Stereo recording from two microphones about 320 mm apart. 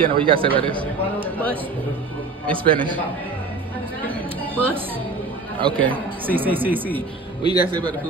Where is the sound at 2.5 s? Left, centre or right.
Centre.